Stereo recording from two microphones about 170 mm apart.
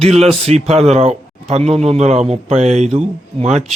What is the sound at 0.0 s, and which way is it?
Speech, 35° right (ahead or behind).